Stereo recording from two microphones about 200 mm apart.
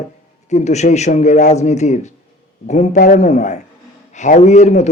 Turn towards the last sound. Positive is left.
turn(degrees=35)  # may be behind; listen again after turning